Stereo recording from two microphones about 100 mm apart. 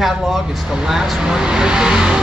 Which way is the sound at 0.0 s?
5° right (ahead or behind).